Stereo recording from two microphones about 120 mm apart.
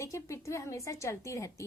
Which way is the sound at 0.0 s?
25° left (ahead or behind).